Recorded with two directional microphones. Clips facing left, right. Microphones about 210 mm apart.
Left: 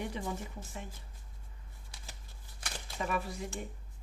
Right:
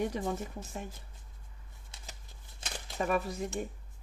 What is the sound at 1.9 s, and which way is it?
Shuffling cards, 25° right (ahead or behind).